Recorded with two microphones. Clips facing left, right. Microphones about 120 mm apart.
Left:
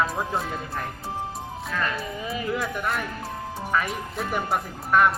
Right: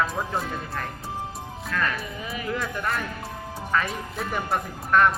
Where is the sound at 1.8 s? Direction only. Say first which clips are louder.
Left 1 dB; 25° left (ahead or behind).